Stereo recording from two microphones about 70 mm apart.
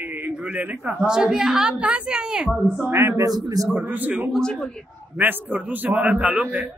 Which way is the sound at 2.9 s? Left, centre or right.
Right.